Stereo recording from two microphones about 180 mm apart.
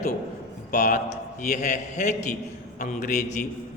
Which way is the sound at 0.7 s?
45° left (ahead or behind).